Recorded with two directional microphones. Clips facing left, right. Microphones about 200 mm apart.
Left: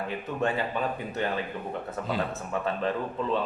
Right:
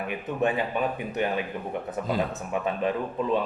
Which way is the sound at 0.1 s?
15° right (ahead or behind).